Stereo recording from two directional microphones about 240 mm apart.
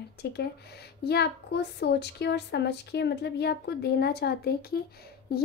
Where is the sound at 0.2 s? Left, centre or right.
Left.